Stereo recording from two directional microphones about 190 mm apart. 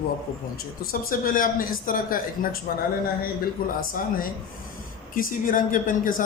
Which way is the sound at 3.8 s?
50° left (ahead or behind).